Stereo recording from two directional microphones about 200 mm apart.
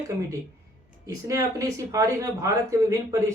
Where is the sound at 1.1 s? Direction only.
15° right (ahead or behind).